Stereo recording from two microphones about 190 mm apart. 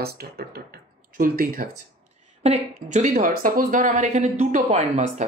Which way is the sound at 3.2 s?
50° right (ahead or behind).